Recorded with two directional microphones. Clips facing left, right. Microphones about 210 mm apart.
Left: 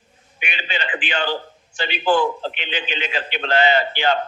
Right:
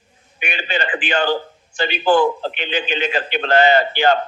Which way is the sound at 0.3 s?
45° right (ahead or behind).